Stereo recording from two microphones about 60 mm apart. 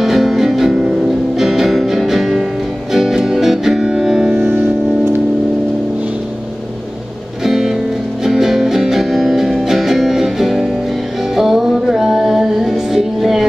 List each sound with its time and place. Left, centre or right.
0.0 s music: centre
4.3 s music: centre
7.4 s music: centre